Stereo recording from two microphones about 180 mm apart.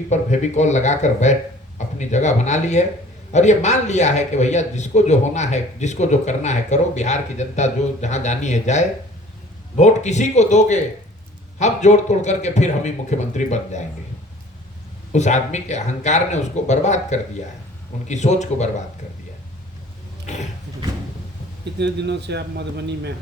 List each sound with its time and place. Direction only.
0.1 s a man's voice: 40° left (ahead or behind)
15.1 s a man's voice: 40° left (ahead or behind)
21.8 s a man's voice: 70° right (ahead or behind)